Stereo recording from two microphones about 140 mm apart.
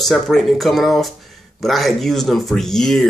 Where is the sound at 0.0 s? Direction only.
Centre (ahead or behind).